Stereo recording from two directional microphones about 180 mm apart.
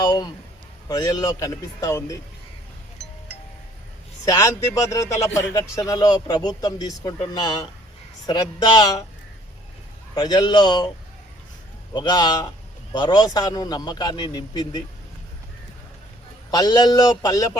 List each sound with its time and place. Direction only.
0.0 s a sound: 20° left (ahead or behind)
0.9 s speech: 20° left (ahead or behind)
4.3 s speech: 20° left (ahead or behind)
10.2 s speech: 25° left (ahead or behind)
11.9 s speech: 20° left (ahead or behind)
16.5 s speech: 20° left (ahead or behind)